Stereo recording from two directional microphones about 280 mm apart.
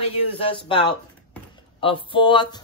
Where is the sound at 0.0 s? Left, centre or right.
Centre.